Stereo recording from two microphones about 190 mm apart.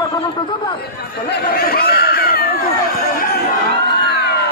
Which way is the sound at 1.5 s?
50° left (ahead or behind).